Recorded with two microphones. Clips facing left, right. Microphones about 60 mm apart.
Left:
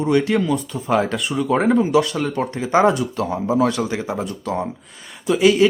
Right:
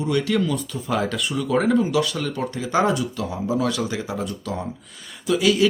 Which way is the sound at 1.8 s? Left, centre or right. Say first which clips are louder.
Left 4 dB; left.